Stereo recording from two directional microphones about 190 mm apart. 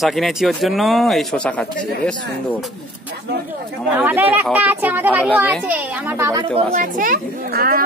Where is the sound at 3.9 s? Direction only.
10° right (ahead or behind).